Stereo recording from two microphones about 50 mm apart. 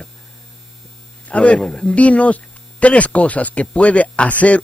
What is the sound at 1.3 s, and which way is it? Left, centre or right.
Speech, left.